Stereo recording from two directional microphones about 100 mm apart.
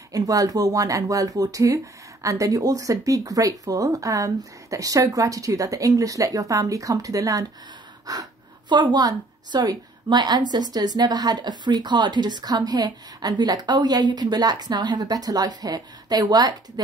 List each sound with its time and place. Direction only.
0.1 s a woman's voice: 35° right (ahead or behind)